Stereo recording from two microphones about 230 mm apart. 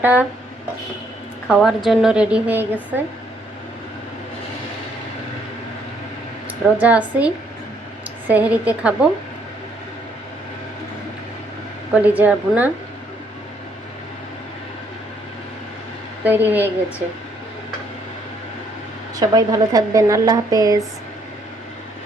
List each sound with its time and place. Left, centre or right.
0.0 s a woman's voice: centre
1.5 s a woman's voice: centre
6.8 s a woman's voice: centre
8.3 s a woman's voice: centre
11.9 s a woman's voice: centre
16.2 s a woman's voice: centre
19.2 s a woman's voice: centre